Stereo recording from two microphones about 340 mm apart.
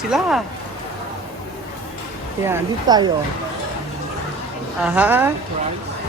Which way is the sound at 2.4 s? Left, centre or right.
Centre.